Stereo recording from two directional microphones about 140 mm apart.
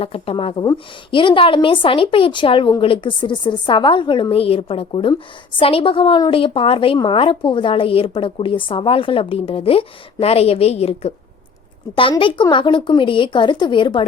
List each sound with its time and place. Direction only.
0.0 s a woman's voice: 40° left (ahead or behind)
12.2 s a woman's voice: 35° left (ahead or behind)